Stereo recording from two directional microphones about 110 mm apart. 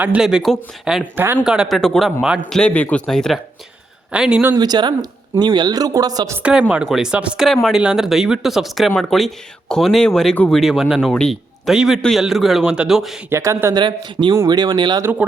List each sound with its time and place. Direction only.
0.0 s speech: 10° right (ahead or behind)
1.1 s speech: 20° right (ahead or behind)
1.5 s speech: centre (ahead or behind)
2.5 s speech: 10° left (ahead or behind)
4.1 s speech: 10° right (ahead or behind)
4.5 s speech: 40° right (ahead or behind)
6.4 s speech: 10° right (ahead or behind); by 10.6 s 10° left (ahead or behind)
10.6 s a man's voice: centre (ahead or behind)
13.3 s speech: 25° right (ahead or behind)
13.7 s speech: 45° right (ahead or behind)